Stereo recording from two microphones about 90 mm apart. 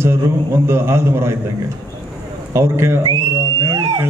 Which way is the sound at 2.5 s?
30° right (ahead or behind).